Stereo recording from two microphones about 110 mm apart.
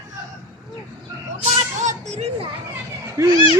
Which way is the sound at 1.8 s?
90° right.